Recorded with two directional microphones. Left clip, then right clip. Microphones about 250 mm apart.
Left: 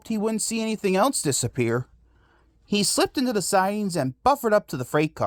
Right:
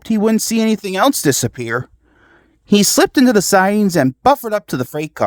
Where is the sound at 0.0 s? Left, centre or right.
Right.